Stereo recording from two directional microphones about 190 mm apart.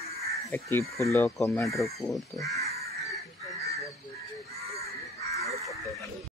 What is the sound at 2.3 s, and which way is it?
Speech, 15° left (ahead or behind).